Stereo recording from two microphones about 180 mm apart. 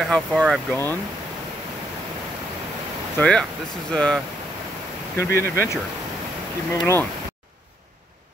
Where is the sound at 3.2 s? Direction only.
5° left (ahead or behind).